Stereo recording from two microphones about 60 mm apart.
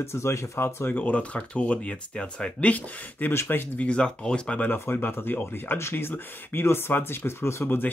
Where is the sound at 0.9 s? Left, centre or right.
Left.